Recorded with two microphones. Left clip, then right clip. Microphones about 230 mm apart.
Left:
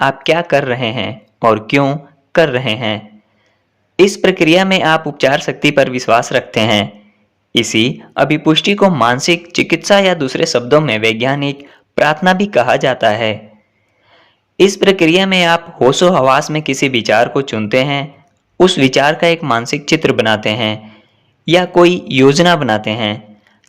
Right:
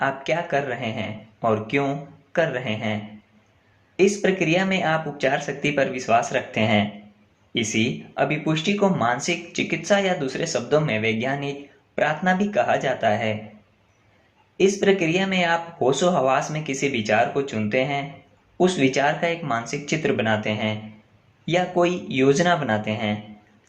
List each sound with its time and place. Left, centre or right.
0.0 s speech: left
14.6 s speech: left